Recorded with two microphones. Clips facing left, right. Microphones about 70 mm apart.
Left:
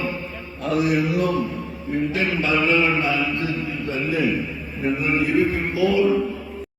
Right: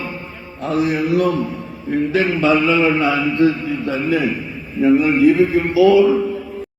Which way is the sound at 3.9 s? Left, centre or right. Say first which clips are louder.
Right 5 dB; right.